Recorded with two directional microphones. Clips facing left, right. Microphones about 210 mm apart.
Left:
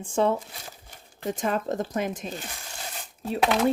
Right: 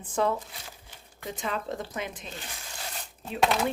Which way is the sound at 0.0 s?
25° left (ahead or behind).